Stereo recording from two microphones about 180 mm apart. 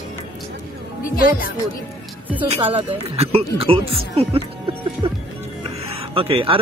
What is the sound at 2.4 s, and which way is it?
Speech, 35° right (ahead or behind).